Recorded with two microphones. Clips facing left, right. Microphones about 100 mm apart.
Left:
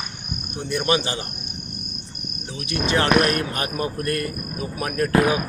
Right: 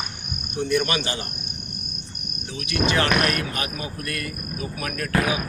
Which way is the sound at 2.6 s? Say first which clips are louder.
Left 1 dB; 30° left (ahead or behind).